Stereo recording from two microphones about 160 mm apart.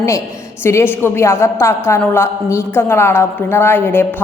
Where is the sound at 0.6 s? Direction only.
15° left (ahead or behind).